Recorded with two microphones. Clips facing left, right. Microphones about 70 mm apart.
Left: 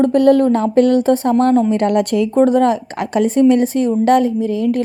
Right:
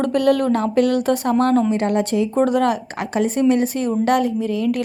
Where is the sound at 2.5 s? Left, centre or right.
Left.